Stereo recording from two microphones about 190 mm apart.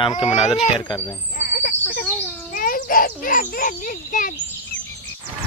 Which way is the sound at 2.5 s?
45° left (ahead or behind).